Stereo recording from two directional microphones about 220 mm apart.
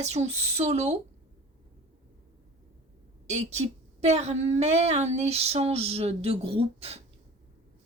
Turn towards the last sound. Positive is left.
turn(degrees=-25)  # may be behind; listen again after turning